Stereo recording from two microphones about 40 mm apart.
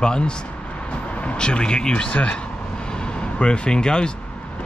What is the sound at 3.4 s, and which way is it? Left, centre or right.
Speech, left.